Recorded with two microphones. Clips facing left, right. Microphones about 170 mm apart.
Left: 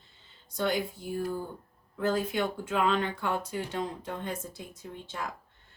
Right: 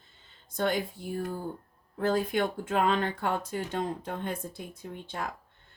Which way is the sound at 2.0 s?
50° right (ahead or behind).